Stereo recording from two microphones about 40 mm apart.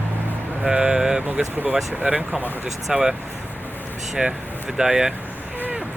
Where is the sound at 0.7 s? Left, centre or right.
Centre.